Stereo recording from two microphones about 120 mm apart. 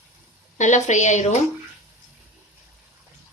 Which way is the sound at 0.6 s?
80° left.